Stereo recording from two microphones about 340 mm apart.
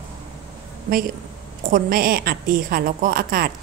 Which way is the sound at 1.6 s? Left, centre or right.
Right.